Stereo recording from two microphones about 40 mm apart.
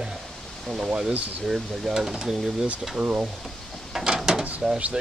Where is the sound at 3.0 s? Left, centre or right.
Right.